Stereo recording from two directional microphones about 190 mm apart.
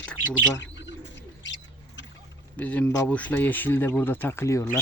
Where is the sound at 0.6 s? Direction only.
70° left (ahead or behind).